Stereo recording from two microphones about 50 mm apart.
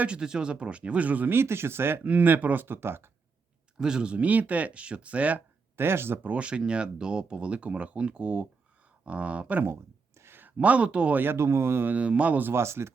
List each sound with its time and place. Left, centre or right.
0.2 s speech: centre; by 1.3 s right
1.3 s speech: right
2.0 s speech: right
3.8 s speech: centre
5.7 s speech: right
6.2 s speech: right
10.2 s a sound: right
10.4 s speech: right
11.2 s speech: right
11.9 s speech: right
12.4 s speech: right
12.6 s speech: right